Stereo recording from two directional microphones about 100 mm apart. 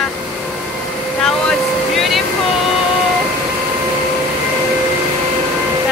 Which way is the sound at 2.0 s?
Centre (ahead or behind).